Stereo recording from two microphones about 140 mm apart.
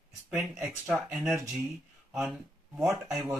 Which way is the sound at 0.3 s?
10° right (ahead or behind).